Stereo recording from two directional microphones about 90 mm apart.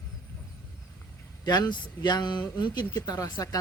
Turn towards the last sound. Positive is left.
turn(degrees=40)  # may be behind; listen again after turning